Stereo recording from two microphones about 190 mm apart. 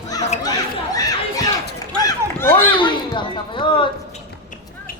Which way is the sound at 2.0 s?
15° left (ahead or behind).